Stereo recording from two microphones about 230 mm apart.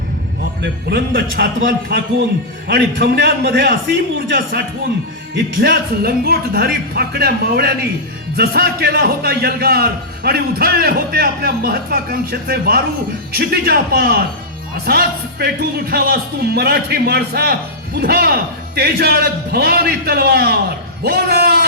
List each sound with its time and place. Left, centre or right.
0.6 s a man's voice: right